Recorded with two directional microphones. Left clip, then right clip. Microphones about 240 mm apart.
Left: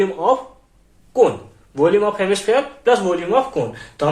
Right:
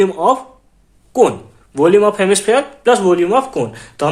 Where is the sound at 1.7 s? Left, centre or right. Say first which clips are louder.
Right 5 dB; right.